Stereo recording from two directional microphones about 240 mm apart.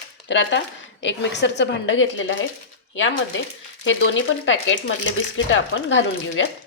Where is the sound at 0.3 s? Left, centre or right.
Left.